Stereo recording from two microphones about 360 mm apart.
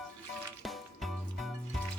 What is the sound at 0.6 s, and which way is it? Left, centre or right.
Music, centre.